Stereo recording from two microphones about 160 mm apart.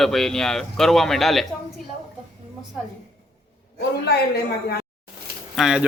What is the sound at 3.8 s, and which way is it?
Speech, 90° left.